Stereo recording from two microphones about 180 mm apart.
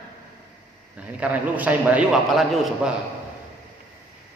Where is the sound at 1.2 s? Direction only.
10° right (ahead or behind).